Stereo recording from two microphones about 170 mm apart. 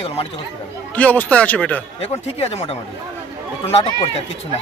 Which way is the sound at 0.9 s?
10° left (ahead or behind).